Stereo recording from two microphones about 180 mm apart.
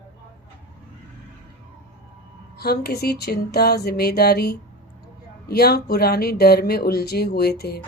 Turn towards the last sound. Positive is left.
turn(degrees=60)  # may be behind; listen again after turning